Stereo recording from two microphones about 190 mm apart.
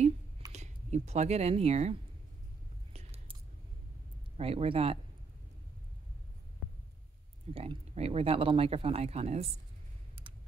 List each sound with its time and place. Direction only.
0.5 s speech: 35° right (ahead or behind)
2.9 s whispering: 35° right (ahead or behind)
4.4 s speech: 30° right (ahead or behind)
7.5 s speech: 30° right (ahead or behind)